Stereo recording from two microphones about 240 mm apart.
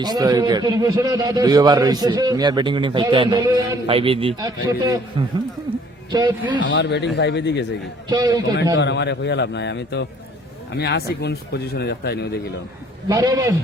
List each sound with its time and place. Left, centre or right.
0.0 s a man's voice: centre
6.1 s a man's voice: centre
6.6 s speech: left
8.1 s a man's voice: centre
8.7 s speech: left
13.1 s a man's voice: centre